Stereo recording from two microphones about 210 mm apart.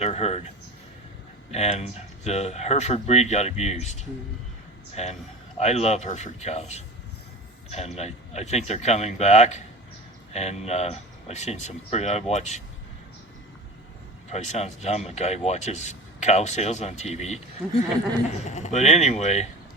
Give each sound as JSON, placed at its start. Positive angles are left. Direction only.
{"t": 0.0, "sound": "speech", "side_deg": 30}
{"t": 1.5, "sound": "speech", "side_deg": 30}
{"t": 5.0, "sound": "speech", "side_deg": 30}
{"t": 14.3, "sound": "speech", "side_deg": 30}
{"t": 18.4, "sound": "speech", "side_deg": 30}